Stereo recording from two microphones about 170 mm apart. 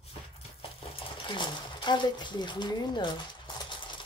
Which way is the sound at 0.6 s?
30° left (ahead or behind).